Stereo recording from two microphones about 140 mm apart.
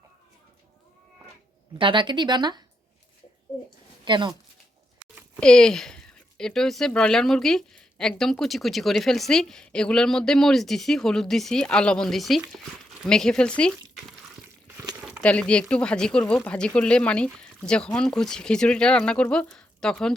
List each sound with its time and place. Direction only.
1.8 s speech: 35° right (ahead or behind)
4.0 s speech: 35° right (ahead or behind)
5.4 s speech: 5° left (ahead or behind)
15.2 s speech: 10° left (ahead or behind)